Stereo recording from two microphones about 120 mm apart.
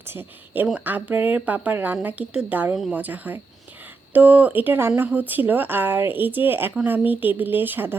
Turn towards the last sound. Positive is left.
turn(degrees=-15)  # may be behind; listen again after turning